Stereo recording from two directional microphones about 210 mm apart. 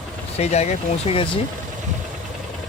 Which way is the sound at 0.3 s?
30° left (ahead or behind).